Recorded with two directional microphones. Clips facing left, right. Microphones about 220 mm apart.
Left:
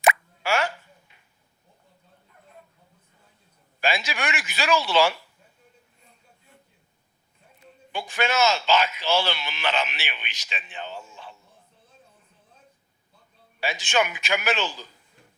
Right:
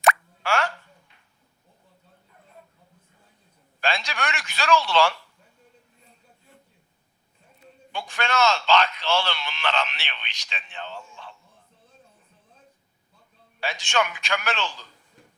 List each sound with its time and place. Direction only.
0.0 s plop: 5° left (ahead or behind)
3.8 s a man's voice: 5° left (ahead or behind)
7.9 s a man's voice: 5° left (ahead or behind)
13.6 s a man's voice: 5° left (ahead or behind)